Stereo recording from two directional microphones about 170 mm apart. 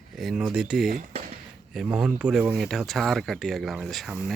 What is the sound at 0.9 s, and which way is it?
Speech, 50° right (ahead or behind).